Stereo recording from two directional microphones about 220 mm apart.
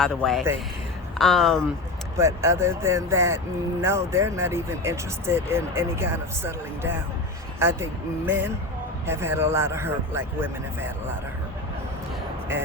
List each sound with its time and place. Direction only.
0.0 s speech: 5° left (ahead or behind)
2.1 s speech: 15° right (ahead or behind)